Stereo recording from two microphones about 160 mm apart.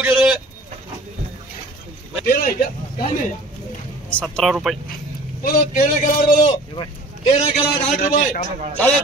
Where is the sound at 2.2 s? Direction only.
70° left (ahead or behind).